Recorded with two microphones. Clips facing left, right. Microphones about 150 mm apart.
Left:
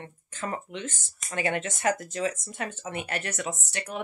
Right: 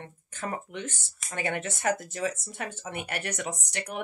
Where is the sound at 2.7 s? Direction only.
10° right (ahead or behind).